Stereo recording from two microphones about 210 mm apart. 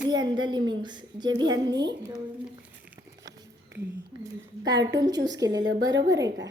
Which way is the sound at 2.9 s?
15° right (ahead or behind).